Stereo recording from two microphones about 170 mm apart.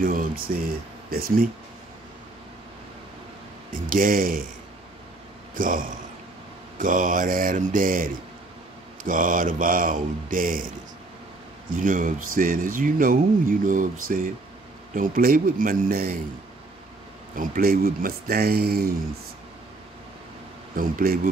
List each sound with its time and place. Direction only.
0.0 s speech: 55° right (ahead or behind)
3.9 s speech: 55° right (ahead or behind)
5.5 s a man's voice: 55° right (ahead or behind)
11.7 s speech: 55° right (ahead or behind)
17.4 s speech: 60° right (ahead or behind)
20.7 s speech: 60° right (ahead or behind)